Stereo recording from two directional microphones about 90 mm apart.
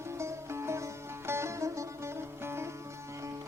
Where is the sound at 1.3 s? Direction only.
30° right (ahead or behind).